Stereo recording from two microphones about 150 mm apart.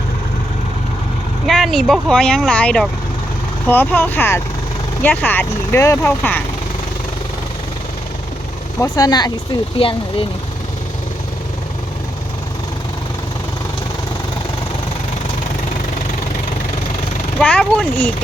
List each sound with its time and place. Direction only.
1.5 s speech: centre (ahead or behind)
8.8 s speech: 25° left (ahead or behind)
9.7 s speech: 35° left (ahead or behind)
17.4 s speech: 5° left (ahead or behind)